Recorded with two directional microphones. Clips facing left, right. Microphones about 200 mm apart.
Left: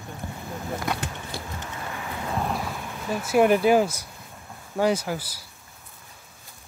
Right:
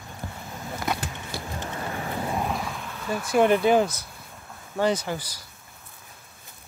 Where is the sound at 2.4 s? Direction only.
Centre (ahead or behind).